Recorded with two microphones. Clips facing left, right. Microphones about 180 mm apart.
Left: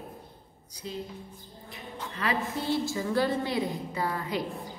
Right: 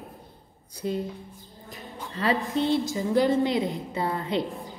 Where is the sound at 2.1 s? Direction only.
30° right (ahead or behind).